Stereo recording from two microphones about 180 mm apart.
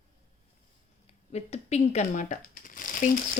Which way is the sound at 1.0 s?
35° left (ahead or behind).